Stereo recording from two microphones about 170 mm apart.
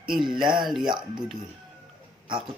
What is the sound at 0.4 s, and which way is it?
Speech, 25° right (ahead or behind).